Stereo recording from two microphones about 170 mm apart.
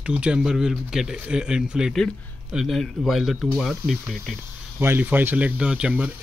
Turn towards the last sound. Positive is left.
turn(degrees=-5)  # may be behind; listen again after turning